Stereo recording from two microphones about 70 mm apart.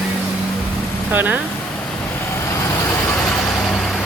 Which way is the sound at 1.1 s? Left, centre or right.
Right.